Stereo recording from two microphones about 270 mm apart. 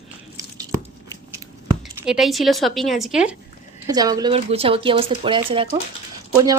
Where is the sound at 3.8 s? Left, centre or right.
Centre.